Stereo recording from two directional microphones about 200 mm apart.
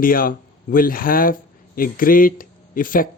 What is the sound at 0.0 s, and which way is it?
Speech, 45° left (ahead or behind).